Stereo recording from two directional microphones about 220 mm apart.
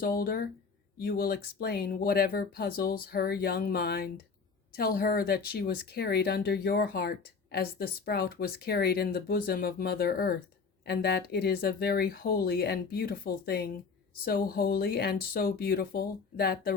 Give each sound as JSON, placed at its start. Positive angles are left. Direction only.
{"t": 0.0, "sound": "speech", "side_deg": 40}